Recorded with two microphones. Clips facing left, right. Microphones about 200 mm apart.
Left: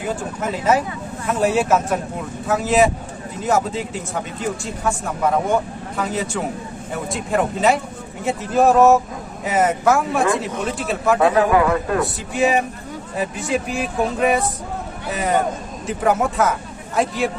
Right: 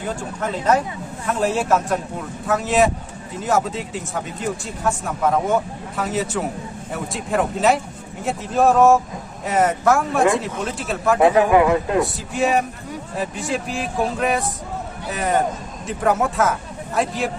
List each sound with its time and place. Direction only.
0.0 s speech: 5° left (ahead or behind)
11.2 s a man's voice: 20° right (ahead or behind)
12.3 s speech: centre (ahead or behind)